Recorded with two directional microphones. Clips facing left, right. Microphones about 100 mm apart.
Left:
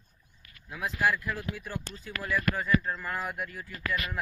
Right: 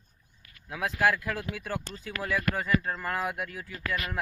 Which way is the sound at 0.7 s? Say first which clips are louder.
Right 2 dB; 90° right.